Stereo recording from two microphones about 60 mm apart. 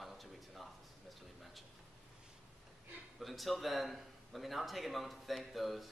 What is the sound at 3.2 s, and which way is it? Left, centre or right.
A man's voice, centre.